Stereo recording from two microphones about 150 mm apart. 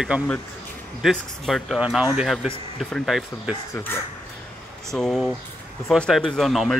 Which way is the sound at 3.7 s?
15° left (ahead or behind).